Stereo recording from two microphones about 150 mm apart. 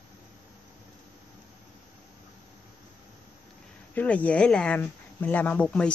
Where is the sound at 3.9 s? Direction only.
10° left (ahead or behind).